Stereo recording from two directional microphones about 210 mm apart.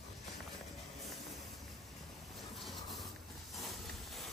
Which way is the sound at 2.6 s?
Centre (ahead or behind).